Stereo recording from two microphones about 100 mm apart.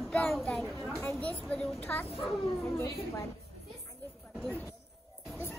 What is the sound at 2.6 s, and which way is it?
Speech, 30° left (ahead or behind).